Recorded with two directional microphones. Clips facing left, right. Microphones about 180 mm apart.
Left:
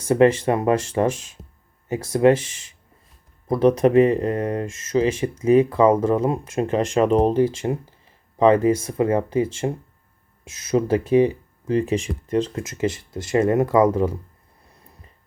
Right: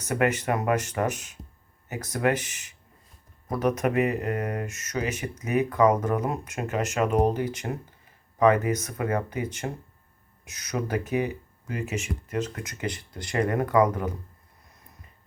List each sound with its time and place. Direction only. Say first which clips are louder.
0.0 s speech: left 9 dB; 30° left (ahead or behind)